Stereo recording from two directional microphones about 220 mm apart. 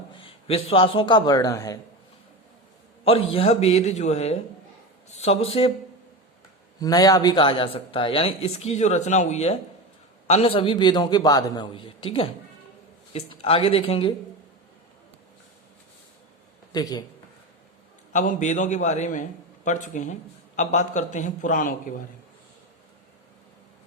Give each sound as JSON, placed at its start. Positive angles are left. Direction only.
{"t": 0.1, "sound": "a man's voice", "side_deg": 25}
{"t": 3.0, "sound": "a man's voice", "side_deg": 25}
{"t": 6.7, "sound": "speech", "side_deg": 15}
{"t": 16.7, "sound": "speech", "side_deg": 20}
{"t": 18.1, "sound": "a man's voice", "side_deg": 35}